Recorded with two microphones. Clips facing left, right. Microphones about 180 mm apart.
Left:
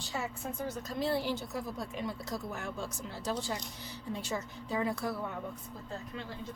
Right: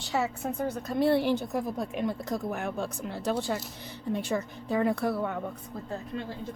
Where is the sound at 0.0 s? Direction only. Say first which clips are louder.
Right 8 dB; 75° right (ahead or behind).